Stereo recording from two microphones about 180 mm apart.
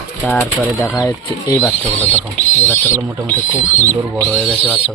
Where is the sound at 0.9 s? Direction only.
20° left (ahead or behind).